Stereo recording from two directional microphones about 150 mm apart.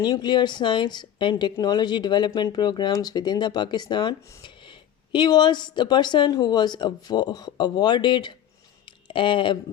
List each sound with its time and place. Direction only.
0.0 s speech: 30° left (ahead or behind)